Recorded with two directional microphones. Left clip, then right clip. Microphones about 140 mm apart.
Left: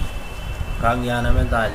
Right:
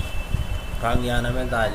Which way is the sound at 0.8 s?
15° right (ahead or behind).